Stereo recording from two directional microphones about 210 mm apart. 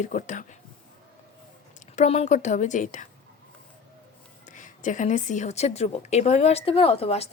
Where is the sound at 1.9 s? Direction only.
30° left (ahead or behind).